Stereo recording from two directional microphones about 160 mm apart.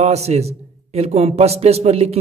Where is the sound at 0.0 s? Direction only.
40° right (ahead or behind).